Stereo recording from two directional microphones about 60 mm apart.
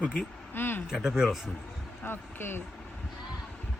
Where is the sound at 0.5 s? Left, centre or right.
Left.